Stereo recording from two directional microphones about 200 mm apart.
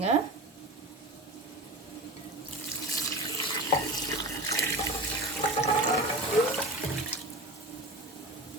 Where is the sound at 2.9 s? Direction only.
15° left (ahead or behind).